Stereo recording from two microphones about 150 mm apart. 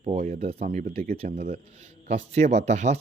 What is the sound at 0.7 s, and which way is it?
Speech, 65° right (ahead or behind).